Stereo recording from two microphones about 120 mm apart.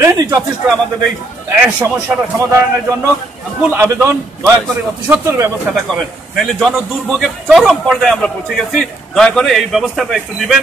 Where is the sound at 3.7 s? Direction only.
15° right (ahead or behind).